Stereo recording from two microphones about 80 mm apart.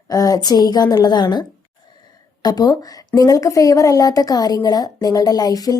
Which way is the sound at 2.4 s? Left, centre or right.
Left.